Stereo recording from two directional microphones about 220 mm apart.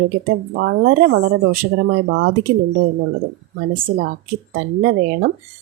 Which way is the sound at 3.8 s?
40° right (ahead or behind).